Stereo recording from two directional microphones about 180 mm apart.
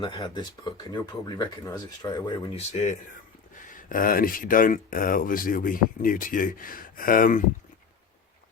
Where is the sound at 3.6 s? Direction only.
50° left (ahead or behind).